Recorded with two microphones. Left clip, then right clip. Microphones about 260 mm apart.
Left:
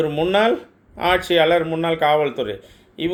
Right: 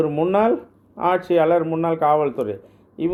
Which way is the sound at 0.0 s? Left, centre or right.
Centre.